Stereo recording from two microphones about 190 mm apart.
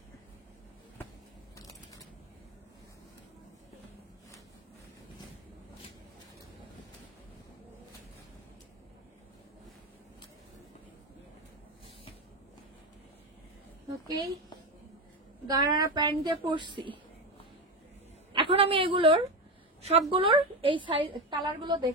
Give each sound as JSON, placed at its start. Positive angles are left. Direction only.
{"t": 14.0, "sound": "a woman's voice", "side_deg": -20}
{"t": 15.4, "sound": "a woman's voice", "side_deg": -20}
{"t": 18.3, "sound": "a sound", "side_deg": -25}
{"t": 19.8, "sound": "a woman's voice", "side_deg": -30}